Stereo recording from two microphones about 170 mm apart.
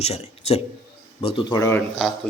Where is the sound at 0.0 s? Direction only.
35° left (ahead or behind).